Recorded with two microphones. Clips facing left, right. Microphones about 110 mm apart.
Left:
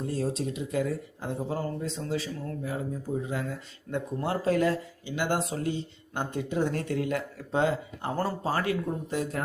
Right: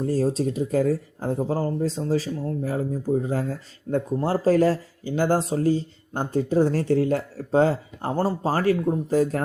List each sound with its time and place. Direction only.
0.0 s speech: 40° right (ahead or behind)